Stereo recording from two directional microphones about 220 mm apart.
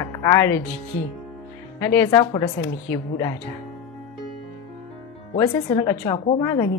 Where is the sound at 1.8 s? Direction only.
10° left (ahead or behind).